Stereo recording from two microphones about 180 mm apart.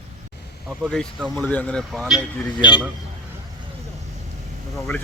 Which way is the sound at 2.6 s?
25° left (ahead or behind).